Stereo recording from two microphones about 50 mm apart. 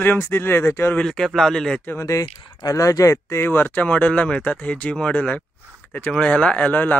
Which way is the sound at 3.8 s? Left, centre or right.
Left.